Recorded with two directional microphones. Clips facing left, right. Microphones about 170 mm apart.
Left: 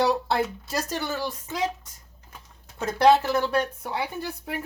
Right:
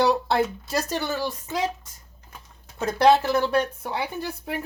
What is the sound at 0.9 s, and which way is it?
Speech, 30° right (ahead or behind).